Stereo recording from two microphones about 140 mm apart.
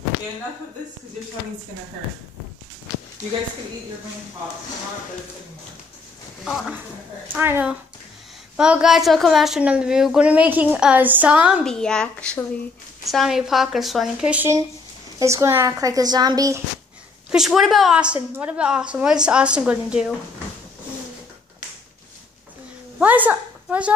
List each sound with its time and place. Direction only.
7.3 s a woman's voice: 15° right (ahead or behind)
11.6 s a woman's voice: 5° left (ahead or behind)
15.1 s speech: 20° right (ahead or behind)
17.3 s a woman's voice: centre (ahead or behind)
22.9 s speech: 10° right (ahead or behind)